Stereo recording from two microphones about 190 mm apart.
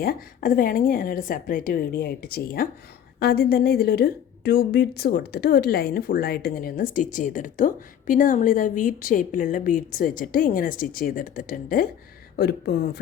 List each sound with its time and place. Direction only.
0.0 s a woman's voice: 50° left (ahead or behind)